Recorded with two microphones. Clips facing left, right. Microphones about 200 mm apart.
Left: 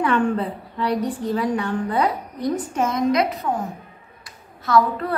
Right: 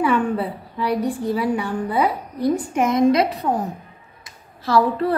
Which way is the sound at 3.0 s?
30° right (ahead or behind).